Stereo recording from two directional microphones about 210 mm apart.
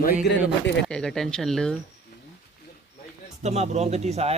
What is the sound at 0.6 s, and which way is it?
Speech, 55° left (ahead or behind).